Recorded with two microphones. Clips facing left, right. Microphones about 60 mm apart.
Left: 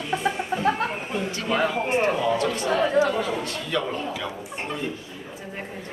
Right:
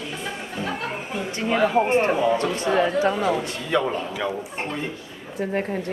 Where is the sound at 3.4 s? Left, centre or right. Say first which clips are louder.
Right 4 dB; right.